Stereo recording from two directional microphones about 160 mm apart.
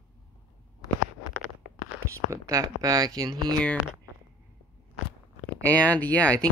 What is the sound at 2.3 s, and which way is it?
Speech, 20° right (ahead or behind).